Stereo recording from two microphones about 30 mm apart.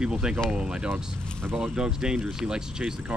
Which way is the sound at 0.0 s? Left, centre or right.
Right.